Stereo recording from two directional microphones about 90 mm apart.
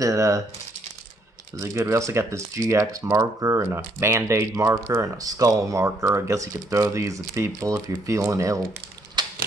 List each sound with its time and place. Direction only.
0.0 s speech: 35° right (ahead or behind)
1.6 s speech: 35° right (ahead or behind)
9.2 s a sound: 55° right (ahead or behind)